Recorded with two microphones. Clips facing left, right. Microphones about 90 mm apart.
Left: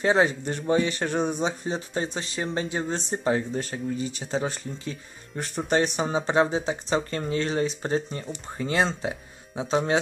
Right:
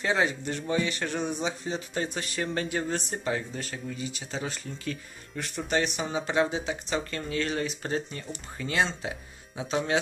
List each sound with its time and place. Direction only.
0.0 s a man's voice: 35° left (ahead or behind)